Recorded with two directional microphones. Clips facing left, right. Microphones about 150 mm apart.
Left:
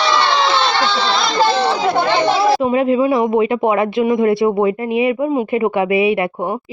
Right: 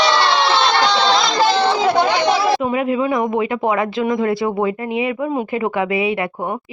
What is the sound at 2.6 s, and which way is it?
Speech, 30° left (ahead or behind).